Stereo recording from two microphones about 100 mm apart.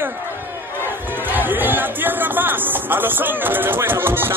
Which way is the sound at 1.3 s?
20° right (ahead or behind).